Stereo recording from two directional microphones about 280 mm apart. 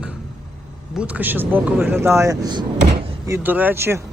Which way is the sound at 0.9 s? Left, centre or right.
Centre.